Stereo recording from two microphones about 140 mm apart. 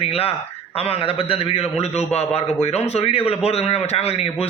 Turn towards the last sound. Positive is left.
turn(degrees=45)  # may be behind; listen again after turning